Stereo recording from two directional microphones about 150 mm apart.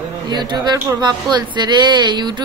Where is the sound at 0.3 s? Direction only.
30° right (ahead or behind).